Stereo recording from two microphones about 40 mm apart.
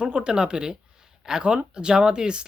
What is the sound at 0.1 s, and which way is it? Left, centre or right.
Speech, right.